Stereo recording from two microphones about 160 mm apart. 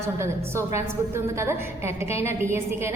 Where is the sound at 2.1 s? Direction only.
15° right (ahead or behind).